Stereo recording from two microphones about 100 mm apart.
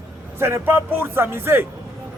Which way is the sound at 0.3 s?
25° right (ahead or behind).